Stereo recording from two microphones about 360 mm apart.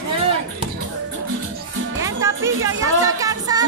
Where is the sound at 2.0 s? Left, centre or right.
Centre.